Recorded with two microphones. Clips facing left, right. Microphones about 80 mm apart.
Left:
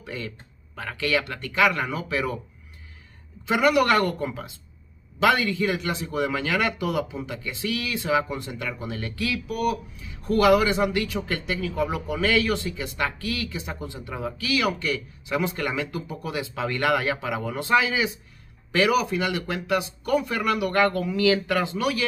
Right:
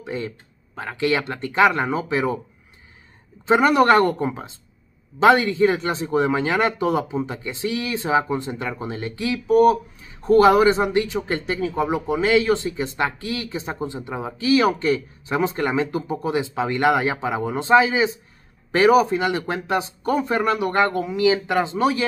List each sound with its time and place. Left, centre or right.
0.0 s a man's voice: right
3.4 s a man's voice: right